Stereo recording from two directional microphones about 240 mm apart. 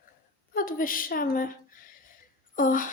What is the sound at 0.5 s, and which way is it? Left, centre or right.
Speech, left.